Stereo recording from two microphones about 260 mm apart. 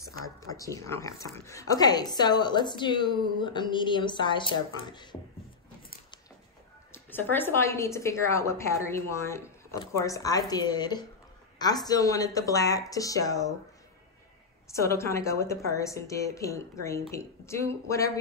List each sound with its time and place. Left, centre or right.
0.7 s speech: centre
6.9 s speech: centre
14.7 s speech: centre